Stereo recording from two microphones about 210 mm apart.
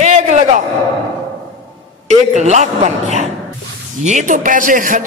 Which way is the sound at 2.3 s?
35° right (ahead or behind).